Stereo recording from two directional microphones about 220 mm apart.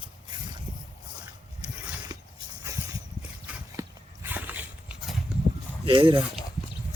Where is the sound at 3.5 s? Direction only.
5° right (ahead or behind).